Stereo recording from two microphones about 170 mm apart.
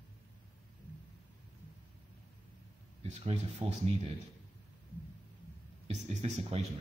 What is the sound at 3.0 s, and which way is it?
Speech, 40° right (ahead or behind).